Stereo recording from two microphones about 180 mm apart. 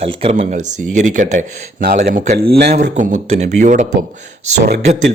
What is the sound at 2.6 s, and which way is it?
Speech, 40° right (ahead or behind).